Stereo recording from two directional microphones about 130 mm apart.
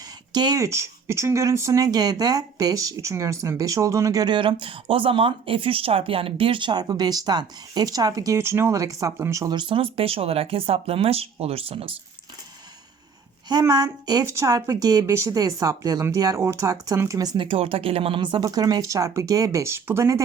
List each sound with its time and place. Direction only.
0.3 s speech: 30° right (ahead or behind); by 11.9 s 45° right (ahead or behind)
13.5 s speech: 30° right (ahead or behind)
17.3 s speech: 45° right (ahead or behind); by 20.2 s 20° right (ahead or behind)